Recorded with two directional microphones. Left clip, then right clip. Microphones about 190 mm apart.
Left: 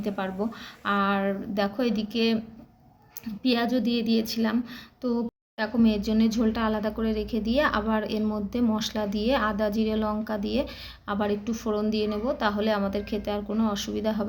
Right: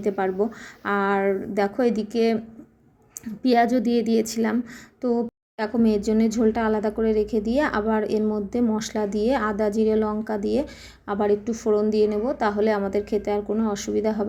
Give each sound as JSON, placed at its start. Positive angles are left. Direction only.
{"t": 0.2, "sound": "a woman's voice", "side_deg": -30}
{"t": 3.4, "sound": "a woman's voice", "side_deg": -30}